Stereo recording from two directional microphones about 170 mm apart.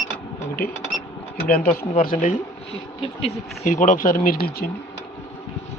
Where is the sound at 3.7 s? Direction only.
50° left (ahead or behind).